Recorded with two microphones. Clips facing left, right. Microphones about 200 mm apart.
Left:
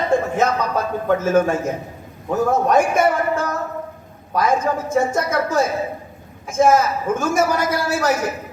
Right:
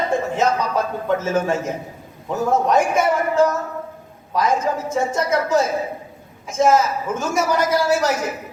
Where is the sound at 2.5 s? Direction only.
55° left (ahead or behind).